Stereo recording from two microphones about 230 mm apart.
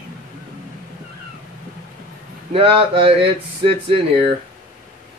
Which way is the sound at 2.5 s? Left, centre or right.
Right.